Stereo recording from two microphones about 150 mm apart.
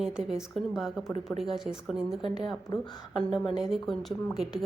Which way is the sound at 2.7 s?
25° left (ahead or behind).